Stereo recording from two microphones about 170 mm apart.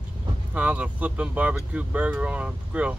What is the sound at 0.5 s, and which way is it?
Speech, 5° right (ahead or behind).